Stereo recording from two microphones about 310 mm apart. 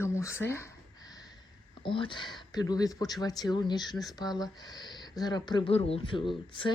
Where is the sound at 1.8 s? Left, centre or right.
Centre.